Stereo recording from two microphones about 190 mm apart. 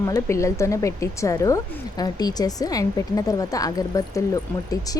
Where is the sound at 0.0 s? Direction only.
15° left (ahead or behind).